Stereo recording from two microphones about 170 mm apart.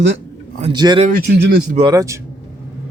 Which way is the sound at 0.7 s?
25° right (ahead or behind).